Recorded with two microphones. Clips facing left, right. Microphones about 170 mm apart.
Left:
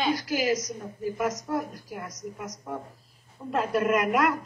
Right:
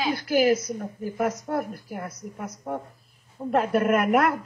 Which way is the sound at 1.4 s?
55° right (ahead or behind).